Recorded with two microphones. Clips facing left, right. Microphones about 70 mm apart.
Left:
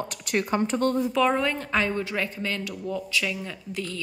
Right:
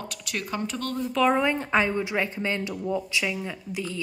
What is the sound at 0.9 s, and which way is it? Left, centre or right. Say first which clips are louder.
Speech: left 3 dB; centre.